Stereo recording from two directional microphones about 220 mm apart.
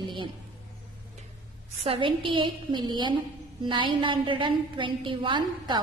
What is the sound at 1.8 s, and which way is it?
A woman's voice, 25° right (ahead or behind).